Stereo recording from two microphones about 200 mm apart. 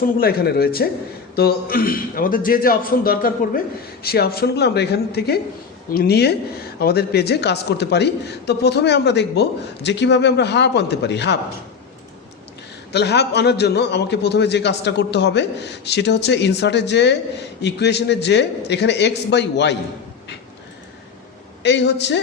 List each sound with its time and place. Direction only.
0.2 s a man's voice: 50° left (ahead or behind)
12.9 s a man's voice: 55° left (ahead or behind)
21.6 s a man's voice: 60° left (ahead or behind)